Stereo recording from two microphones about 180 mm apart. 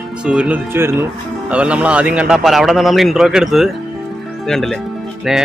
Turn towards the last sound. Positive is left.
turn(degrees=0)  # may be behind; listen again after turning